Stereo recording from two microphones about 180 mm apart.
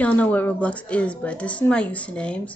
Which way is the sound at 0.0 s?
10° left (ahead or behind).